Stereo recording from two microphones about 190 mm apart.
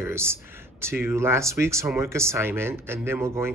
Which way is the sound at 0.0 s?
15° right (ahead or behind).